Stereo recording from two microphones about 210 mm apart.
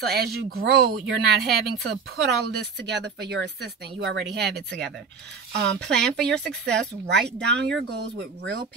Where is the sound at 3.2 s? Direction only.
50° right (ahead or behind).